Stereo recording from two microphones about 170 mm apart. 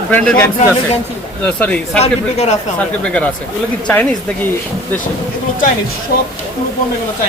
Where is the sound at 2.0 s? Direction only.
40° left (ahead or behind).